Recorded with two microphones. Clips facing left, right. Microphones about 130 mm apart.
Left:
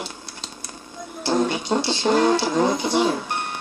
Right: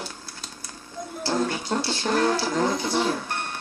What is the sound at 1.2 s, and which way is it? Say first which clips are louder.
Speech: left 4 dB; 20° left (ahead or behind).